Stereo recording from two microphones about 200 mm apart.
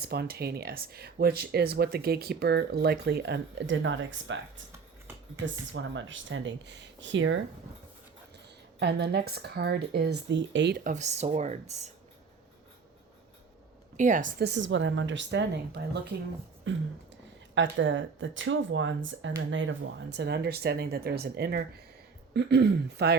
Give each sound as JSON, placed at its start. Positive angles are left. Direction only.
{"t": 0.0, "sound": "speech", "side_deg": -50}
{"t": 5.7, "sound": "speech", "side_deg": -70}
{"t": 8.8, "sound": "speech", "side_deg": -55}
{"t": 13.9, "sound": "a woman's voice", "side_deg": -40}
{"t": 14.4, "sound": "speech", "side_deg": -65}